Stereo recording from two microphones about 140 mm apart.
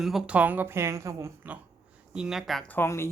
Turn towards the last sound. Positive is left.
turn(degrees=20)  # may be behind; listen again after turning